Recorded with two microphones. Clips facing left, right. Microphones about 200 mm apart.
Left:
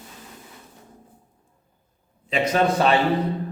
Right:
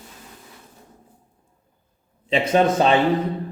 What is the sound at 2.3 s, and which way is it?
Speech, 25° right (ahead or behind).